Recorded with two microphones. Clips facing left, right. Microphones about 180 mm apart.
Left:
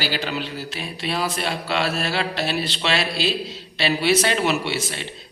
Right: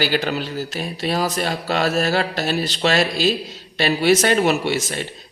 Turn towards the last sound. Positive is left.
turn(degrees=-45)  # may be behind; listen again after turning